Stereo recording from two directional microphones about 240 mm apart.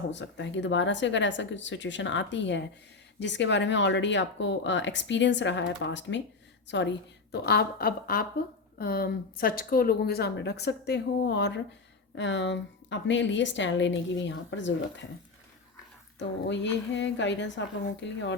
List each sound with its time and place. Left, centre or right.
0.1 s a woman's voice: left
16.1 s speech: left